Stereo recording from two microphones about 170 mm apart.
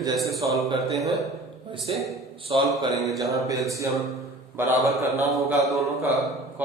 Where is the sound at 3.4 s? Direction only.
20° right (ahead or behind).